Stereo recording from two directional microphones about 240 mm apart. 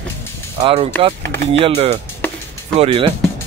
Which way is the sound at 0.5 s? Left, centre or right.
Right.